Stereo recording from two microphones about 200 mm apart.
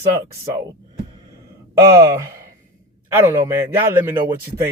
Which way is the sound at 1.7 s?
15° right (ahead or behind).